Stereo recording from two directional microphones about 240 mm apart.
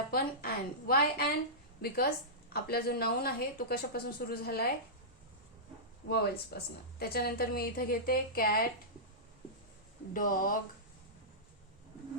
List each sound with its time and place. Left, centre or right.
0.1 s a woman's voice: left
6.1 s a woman's voice: left
10.2 s a woman's voice: left